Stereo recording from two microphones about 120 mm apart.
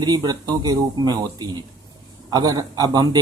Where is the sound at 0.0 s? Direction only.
35° right (ahead or behind).